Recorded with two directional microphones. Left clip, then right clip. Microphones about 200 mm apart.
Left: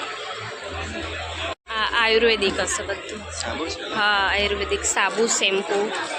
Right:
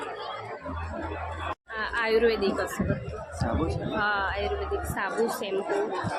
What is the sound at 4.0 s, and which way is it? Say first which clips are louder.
A woman's voice: left 8 dB; 10° left (ahead or behind).